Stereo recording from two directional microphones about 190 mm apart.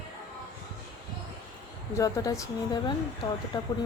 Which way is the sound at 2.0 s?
15° left (ahead or behind).